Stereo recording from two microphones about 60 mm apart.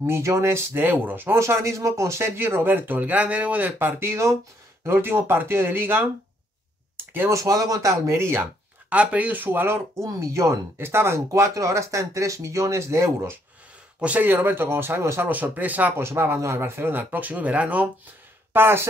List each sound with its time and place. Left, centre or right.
0.0 s speech: right
1.4 s speech: right
3.7 s speech: right
7.2 s speech: right
7.9 s speech: right
8.4 s speech: right
9.9 s speech: right
10.8 s speech: right
13.9 s speech: right
14.3 s speech: right
15.2 s speech: right
16.0 s speech: right
17.1 s speech: right
18.5 s speech: right